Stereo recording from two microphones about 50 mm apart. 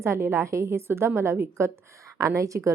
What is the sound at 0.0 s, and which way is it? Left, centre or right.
A woman's voice, right.